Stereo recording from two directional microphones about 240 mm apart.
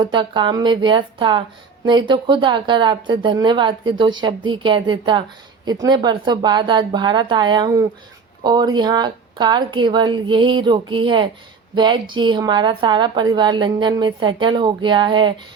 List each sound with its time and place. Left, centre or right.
0.0 s a woman's voice: centre